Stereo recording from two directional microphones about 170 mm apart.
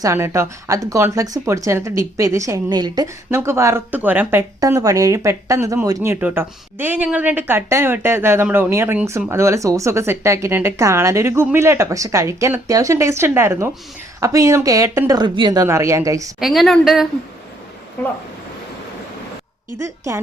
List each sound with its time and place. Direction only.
0.0 s a woman's voice: 15° right (ahead or behind)
16.4 s a woman's voice: centre (ahead or behind)